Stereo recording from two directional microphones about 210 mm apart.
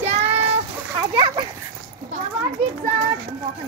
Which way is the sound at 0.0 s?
30° right (ahead or behind).